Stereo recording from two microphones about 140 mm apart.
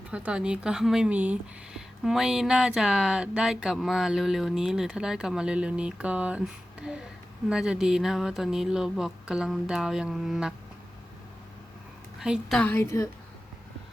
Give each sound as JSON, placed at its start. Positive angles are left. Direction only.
{"t": 0.1, "sound": "speech", "side_deg": -10}
{"t": 12.2, "sound": "speech", "side_deg": -5}
{"t": 12.5, "sound": "a woman's voice", "side_deg": 15}